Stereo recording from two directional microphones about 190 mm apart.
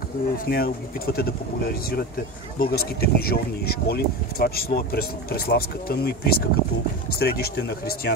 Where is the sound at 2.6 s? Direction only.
55° left (ahead or behind).